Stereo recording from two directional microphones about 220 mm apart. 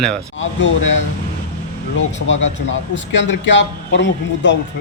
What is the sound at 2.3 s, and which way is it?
A man's voice, 60° left (ahead or behind).